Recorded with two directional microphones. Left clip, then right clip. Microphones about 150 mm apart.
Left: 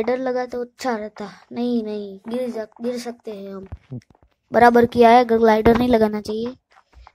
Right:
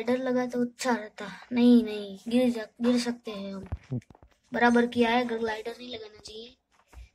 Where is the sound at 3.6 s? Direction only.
Centre (ahead or behind).